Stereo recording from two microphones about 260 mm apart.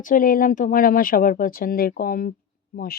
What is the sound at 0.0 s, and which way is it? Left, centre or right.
Speech, left.